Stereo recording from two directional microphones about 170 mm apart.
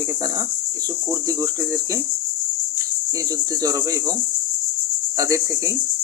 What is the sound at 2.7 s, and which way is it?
Cricket, 20° right (ahead or behind).